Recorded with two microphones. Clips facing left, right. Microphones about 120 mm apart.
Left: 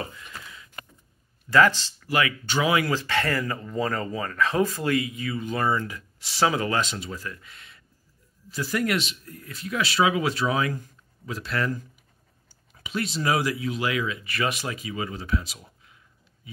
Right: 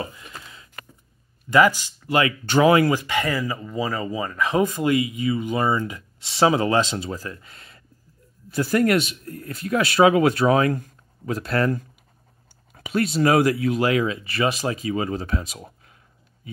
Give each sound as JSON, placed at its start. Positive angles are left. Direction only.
{"t": 0.1, "sound": "a sound", "side_deg": -25}
{"t": 1.5, "sound": "speech", "side_deg": -10}
{"t": 2.0, "sound": "speech", "side_deg": -25}
{"t": 2.4, "sound": "speech", "side_deg": -50}
{"t": 2.9, "sound": "speech", "side_deg": -15}
{"t": 8.5, "sound": "speech", "side_deg": -50}
{"t": 13.8, "sound": "speech", "side_deg": -35}